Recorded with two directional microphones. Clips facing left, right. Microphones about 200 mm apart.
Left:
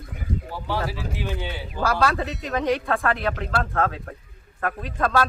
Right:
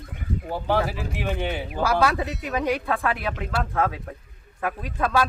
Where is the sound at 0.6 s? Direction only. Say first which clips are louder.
Right 4 dB; 55° right (ahead or behind).